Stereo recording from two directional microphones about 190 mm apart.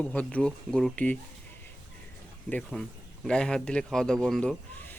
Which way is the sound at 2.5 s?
5° left (ahead or behind).